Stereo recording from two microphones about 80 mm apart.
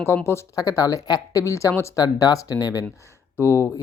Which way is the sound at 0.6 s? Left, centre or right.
Left.